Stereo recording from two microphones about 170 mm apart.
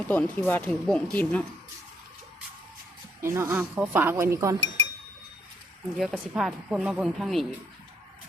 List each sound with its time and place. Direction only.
0.1 s speech: 10° left (ahead or behind)
3.2 s speech: 15° right (ahead or behind)
6.0 s speech: centre (ahead or behind)